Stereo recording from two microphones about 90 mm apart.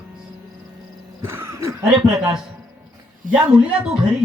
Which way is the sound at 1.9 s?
10° right (ahead or behind).